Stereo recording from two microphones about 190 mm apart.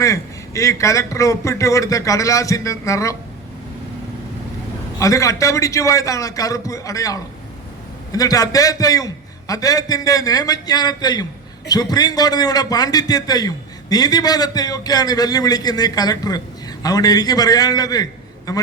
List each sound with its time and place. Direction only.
0.0 s a man's voice: 15° left (ahead or behind)
4.9 s a man's voice: 15° left (ahead or behind)